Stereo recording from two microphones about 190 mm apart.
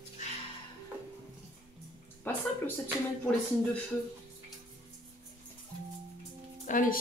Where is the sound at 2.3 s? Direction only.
10° left (ahead or behind).